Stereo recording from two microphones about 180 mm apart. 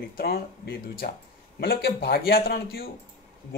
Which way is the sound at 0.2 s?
60° left (ahead or behind).